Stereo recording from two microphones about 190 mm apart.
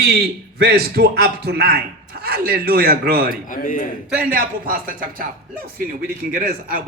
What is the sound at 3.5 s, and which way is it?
Speech, 45° left (ahead or behind).